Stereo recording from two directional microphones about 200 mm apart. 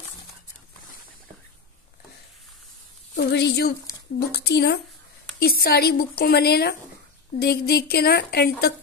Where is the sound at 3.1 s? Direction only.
55° left (ahead or behind).